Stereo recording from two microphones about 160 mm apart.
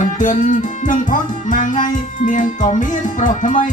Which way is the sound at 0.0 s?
50° left (ahead or behind).